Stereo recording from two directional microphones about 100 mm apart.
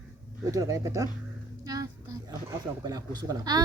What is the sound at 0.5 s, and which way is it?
Speech, 35° right (ahead or behind).